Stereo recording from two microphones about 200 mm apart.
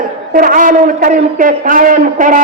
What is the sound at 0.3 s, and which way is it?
A man's voice, 45° right (ahead or behind).